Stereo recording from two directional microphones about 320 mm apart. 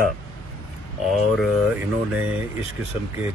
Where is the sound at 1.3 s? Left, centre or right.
Centre.